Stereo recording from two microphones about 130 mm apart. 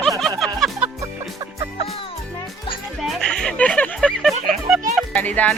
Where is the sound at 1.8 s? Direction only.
45° left (ahead or behind).